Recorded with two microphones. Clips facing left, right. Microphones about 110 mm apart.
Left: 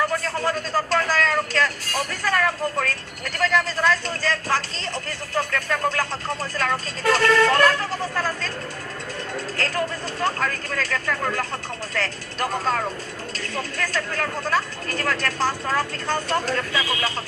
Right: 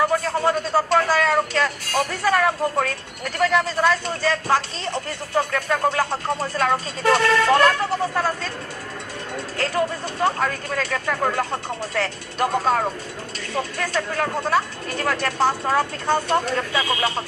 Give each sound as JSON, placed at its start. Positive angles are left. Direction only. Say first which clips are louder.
{"t": 0.0, "sound": "speech", "louder": "right 4 dB", "side_deg": -20}
{"t": 9.6, "sound": "speech", "louder": "right 4 dB", "side_deg": -20}
{"t": 13.5, "sound": "speech", "louder": "right 3 dB", "side_deg": -20}